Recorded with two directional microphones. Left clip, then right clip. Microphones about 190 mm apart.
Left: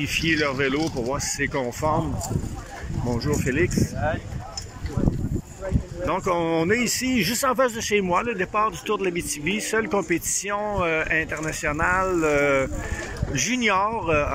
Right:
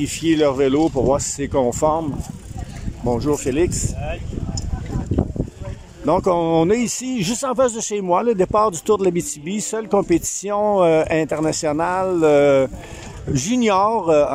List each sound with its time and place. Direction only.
0.0 s speech: 25° right (ahead or behind)
3.1 s speech: 20° right (ahead or behind)
6.0 s speech: 25° right (ahead or behind)